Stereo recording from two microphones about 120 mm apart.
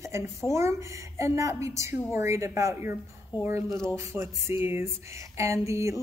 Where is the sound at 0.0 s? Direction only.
25° right (ahead or behind).